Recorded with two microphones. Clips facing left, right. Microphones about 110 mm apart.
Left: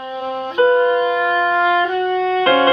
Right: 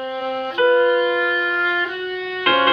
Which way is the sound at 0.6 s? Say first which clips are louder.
Left 2 dB; 25° left (ahead or behind).